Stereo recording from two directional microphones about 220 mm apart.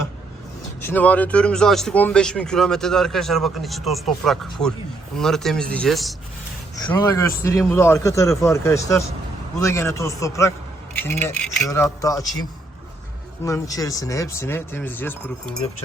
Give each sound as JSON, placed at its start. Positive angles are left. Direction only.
{"t": 0.8, "sound": "speech", "side_deg": 10}
{"t": 4.6, "sound": "a man's voice", "side_deg": 15}
{"t": 5.1, "sound": "speech", "side_deg": 0}
{"t": 6.9, "sound": "a man's voice", "side_deg": 15}
{"t": 13.4, "sound": "a man's voice", "side_deg": 15}